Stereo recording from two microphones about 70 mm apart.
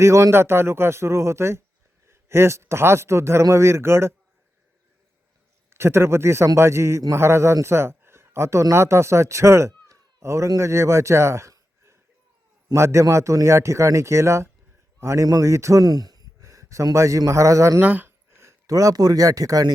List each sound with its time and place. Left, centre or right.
0.0 s a man's voice: right
5.7 s a man's voice: right
12.7 s a man's voice: right
15.8 s a sound: right
16.4 s speech: right
17.7 s speech: right
18.3 s a sound: right
18.7 s speech: right